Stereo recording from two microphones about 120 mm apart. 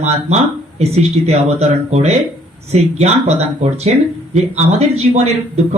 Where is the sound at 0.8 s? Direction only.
65° right (ahead or behind).